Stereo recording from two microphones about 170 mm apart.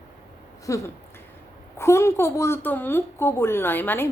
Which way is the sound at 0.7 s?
20° left (ahead or behind).